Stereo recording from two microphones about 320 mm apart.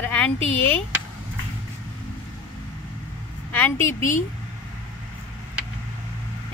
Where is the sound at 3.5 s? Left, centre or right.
Centre.